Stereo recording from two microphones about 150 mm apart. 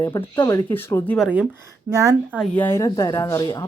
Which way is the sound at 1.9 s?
20° right (ahead or behind).